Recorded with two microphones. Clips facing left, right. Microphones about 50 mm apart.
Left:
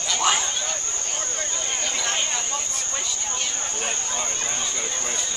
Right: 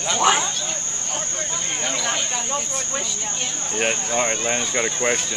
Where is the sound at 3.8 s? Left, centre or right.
Right.